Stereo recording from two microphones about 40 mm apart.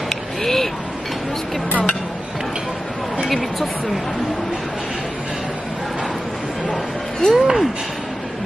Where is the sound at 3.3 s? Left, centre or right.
Centre.